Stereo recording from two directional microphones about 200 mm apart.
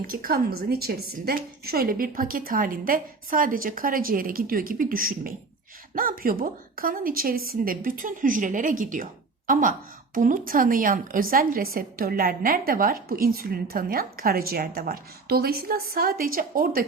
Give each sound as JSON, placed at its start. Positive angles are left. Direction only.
{"t": 0.1, "sound": "a woman's voice", "side_deg": -45}